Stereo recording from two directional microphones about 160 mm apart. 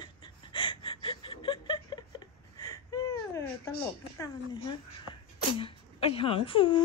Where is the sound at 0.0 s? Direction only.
30° left (ahead or behind).